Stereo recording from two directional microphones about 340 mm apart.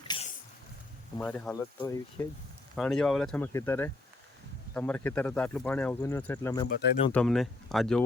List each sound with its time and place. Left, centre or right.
0.1 s a sound: centre
1.2 s speech: centre
6.7 s speech: left
7.1 s speech: centre